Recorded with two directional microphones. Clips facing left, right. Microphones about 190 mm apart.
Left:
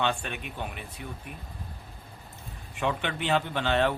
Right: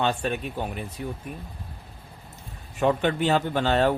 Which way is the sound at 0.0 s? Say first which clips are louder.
Right 5 dB; 40° right (ahead or behind).